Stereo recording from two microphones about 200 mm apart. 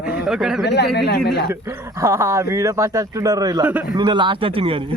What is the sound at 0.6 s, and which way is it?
Speech, 55° left (ahead or behind).